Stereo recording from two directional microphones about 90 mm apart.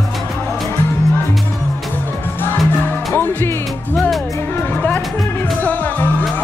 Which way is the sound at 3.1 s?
25° left (ahead or behind).